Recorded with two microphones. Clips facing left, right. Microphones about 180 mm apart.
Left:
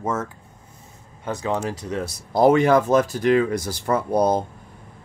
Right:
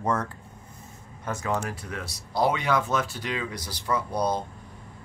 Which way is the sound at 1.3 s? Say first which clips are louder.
Left 4 dB; 15° left (ahead or behind).